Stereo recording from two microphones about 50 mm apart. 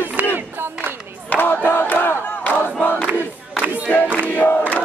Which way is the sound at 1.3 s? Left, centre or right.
Left.